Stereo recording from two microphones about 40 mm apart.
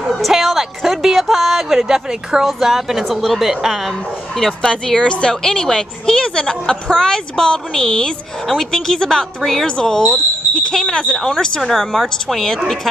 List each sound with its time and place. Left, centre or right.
0.3 s a woman's voice: centre
4.6 s speech: centre